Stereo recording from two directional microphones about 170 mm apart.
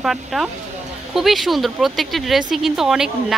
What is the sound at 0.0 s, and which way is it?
Speech, centre (ahead or behind).